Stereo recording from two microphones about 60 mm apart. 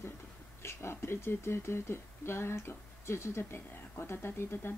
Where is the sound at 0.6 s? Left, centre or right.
Left.